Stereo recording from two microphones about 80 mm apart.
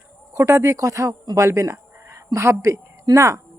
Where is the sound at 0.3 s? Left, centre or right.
Right.